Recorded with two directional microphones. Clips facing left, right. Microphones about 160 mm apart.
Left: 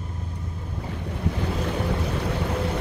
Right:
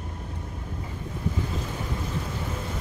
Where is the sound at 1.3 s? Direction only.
70° left (ahead or behind).